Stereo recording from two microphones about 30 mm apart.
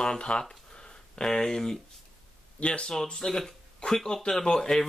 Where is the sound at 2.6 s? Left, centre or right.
Left.